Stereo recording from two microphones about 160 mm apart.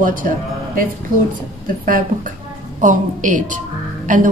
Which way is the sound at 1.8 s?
60° right (ahead or behind).